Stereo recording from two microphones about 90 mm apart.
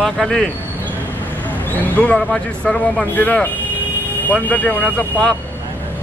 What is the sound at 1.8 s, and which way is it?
Speech, 15° left (ahead or behind).